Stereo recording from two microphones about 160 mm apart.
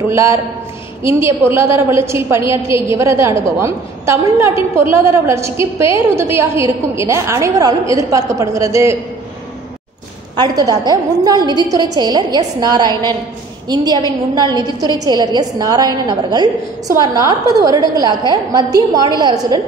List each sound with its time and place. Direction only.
0.1 s a woman's voice: 15° right (ahead or behind)
10.3 s a woman's voice: 25° right (ahead or behind)